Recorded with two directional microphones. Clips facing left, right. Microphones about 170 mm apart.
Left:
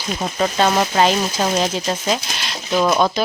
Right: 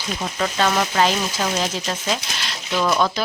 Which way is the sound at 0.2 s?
25° left (ahead or behind).